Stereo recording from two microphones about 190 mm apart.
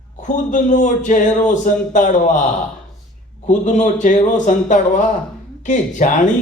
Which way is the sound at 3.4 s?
40° left (ahead or behind).